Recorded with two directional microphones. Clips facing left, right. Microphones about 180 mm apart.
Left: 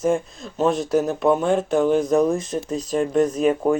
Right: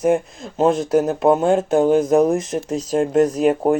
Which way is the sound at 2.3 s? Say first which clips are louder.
Right 3 dB; 85° right.